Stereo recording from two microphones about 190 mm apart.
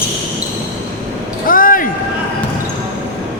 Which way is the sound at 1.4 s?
45° left (ahead or behind).